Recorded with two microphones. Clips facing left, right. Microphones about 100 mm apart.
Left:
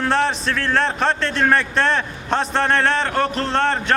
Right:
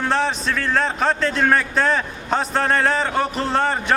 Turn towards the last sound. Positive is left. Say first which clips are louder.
# left 1 dB
turn(degrees=-5)  # may be behind; listen again after turning